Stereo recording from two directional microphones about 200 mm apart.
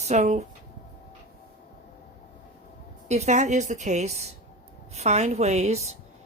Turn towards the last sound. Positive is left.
turn(degrees=-35)  # may be behind; listen again after turning